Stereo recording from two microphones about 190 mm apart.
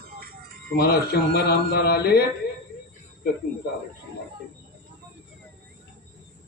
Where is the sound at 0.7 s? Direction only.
55° left (ahead or behind).